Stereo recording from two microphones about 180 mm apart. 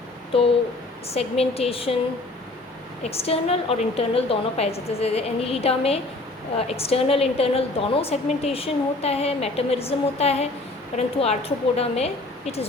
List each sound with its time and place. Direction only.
0.3 s a woman's voice: 30° left (ahead or behind)
3.0 s a woman's voice: 35° left (ahead or behind)